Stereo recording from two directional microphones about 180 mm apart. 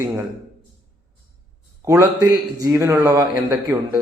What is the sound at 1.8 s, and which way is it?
A man's voice, 15° right (ahead or behind).